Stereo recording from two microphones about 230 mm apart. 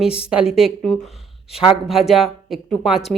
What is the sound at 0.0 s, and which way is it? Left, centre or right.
Speech, centre.